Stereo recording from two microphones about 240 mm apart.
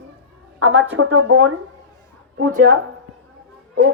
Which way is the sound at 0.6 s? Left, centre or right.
Right.